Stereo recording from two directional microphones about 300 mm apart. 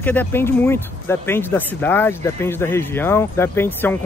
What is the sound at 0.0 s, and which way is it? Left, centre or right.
Speech, centre.